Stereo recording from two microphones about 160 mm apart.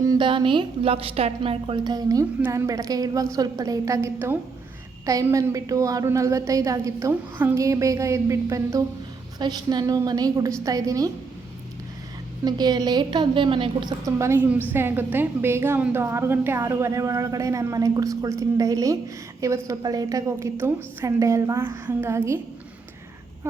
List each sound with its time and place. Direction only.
0.0 s a woman's voice: 25° right (ahead or behind)
12.5 s a woman's voice: 25° right (ahead or behind)